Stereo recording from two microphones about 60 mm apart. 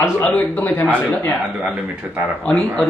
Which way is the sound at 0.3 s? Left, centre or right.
Left.